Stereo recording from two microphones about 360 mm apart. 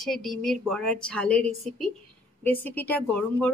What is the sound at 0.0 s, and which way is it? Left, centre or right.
A woman's voice, centre.